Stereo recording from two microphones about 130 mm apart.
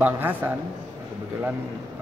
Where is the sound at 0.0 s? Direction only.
15° right (ahead or behind).